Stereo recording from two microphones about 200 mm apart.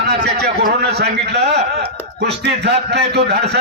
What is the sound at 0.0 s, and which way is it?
A man's voice, 55° right (ahead or behind).